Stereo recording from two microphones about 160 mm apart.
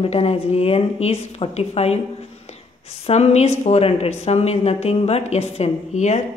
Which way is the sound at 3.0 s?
40° left (ahead or behind).